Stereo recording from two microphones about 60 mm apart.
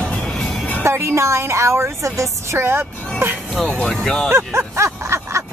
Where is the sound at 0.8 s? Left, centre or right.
Right.